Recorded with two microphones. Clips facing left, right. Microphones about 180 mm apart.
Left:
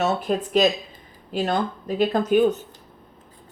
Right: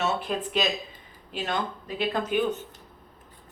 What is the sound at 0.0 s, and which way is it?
Speech, 40° left (ahead or behind).